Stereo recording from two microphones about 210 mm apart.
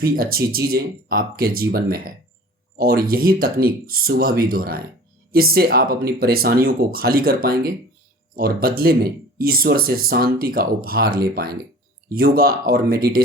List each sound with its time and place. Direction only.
0.0 s speech: 45° right (ahead or behind)